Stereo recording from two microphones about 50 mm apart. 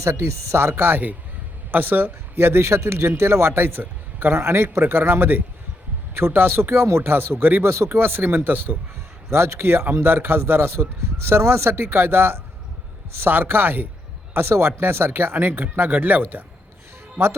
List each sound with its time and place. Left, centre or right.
0.0 s speech: right
7.1 s speech: right
7.6 s speech: right
7.9 s speech: right
9.3 s speech: right
14.4 s speech: right